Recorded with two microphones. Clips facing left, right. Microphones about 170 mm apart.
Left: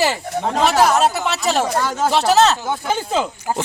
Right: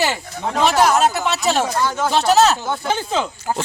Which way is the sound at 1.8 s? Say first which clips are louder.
Left 1 dB; 40° left (ahead or behind).